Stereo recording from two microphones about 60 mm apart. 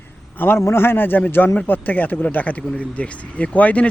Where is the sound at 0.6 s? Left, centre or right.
Left.